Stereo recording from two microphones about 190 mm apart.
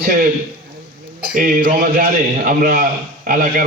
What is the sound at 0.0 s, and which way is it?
Speech, 50° right (ahead or behind).